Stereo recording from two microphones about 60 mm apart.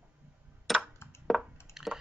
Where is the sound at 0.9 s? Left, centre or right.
Left.